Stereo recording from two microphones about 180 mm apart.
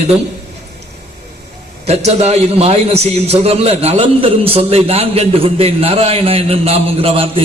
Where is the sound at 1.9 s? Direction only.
35° right (ahead or behind).